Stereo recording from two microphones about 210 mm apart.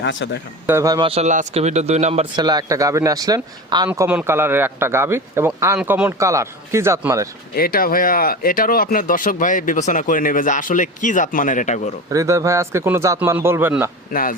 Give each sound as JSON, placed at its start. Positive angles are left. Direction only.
{"t": 0.0, "sound": "speech", "side_deg": 60}
{"t": 0.7, "sound": "a man's voice", "side_deg": -15}
{"t": 2.3, "sound": "a man's voice", "side_deg": -20}
{"t": 7.5, "sound": "speech", "side_deg": 45}
{"t": 12.1, "sound": "a man's voice", "side_deg": -15}
{"t": 14.1, "sound": "a man's voice", "side_deg": 40}